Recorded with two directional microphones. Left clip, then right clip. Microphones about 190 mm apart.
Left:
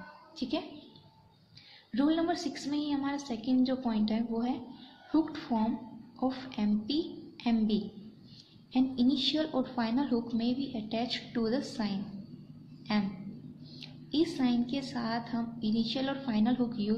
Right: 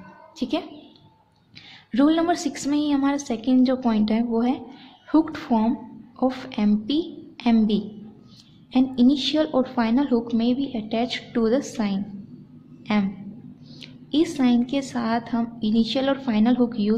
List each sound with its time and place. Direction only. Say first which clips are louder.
0.4 s a woman's voice: right 8 dB; 25° right (ahead or behind)
1.9 s a woman's voice: right 10 dB; 35° right (ahead or behind)
13.7 s a woman's voice: right 8 dB; 30° right (ahead or behind)